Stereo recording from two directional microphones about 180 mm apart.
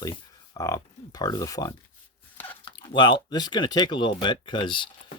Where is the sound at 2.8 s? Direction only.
25° left (ahead or behind).